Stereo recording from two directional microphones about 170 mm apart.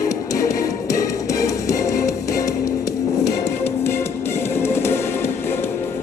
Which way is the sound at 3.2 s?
40° left (ahead or behind).